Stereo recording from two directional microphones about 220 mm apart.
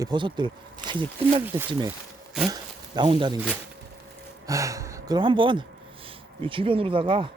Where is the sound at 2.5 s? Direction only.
20° right (ahead or behind).